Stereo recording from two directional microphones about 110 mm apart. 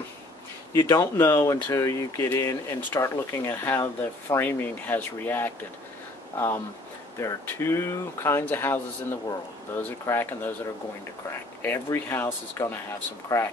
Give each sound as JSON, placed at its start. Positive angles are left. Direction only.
{"t": 0.7, "sound": "speech", "side_deg": 30}
{"t": 11.6, "sound": "speech", "side_deg": 20}